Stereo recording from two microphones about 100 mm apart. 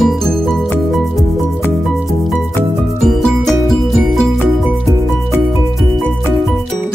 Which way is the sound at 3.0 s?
5° left (ahead or behind).